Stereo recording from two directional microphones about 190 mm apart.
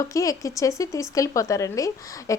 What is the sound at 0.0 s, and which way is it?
A woman's voice, 15° left (ahead or behind).